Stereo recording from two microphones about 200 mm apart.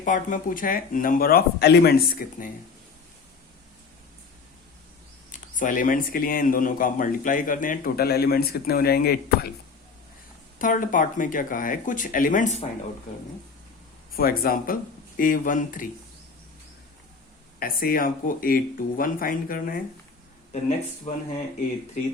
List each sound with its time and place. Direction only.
0.0 s speech: 40° left (ahead or behind)
5.3 s speech: 40° left (ahead or behind)
10.6 s speech: 40° left (ahead or behind)
14.1 s speech: 45° left (ahead or behind)
17.6 s speech: 45° left (ahead or behind)
20.5 s speech: 35° left (ahead or behind)